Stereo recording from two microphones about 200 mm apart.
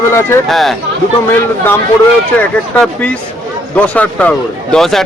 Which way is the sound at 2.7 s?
5° left (ahead or behind).